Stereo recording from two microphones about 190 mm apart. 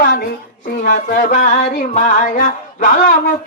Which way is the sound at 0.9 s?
40° left (ahead or behind).